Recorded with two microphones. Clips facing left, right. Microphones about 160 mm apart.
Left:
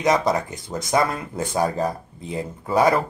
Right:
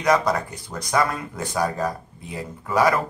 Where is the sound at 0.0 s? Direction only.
25° left (ahead or behind).